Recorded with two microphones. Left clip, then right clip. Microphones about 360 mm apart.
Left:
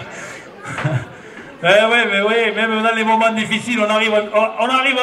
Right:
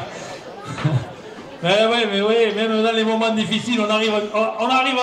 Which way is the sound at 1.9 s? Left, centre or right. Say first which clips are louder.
Left 4 dB; left.